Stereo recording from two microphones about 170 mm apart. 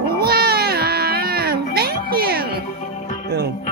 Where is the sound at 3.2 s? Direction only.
75° right (ahead or behind).